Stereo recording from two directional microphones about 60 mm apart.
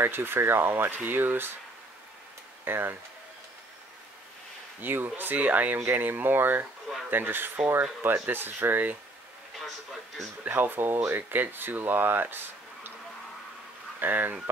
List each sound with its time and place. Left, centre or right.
0.0 s speech: right
2.6 s speech: right
4.8 s speech: right
10.5 s speech: right
13.9 s speech: right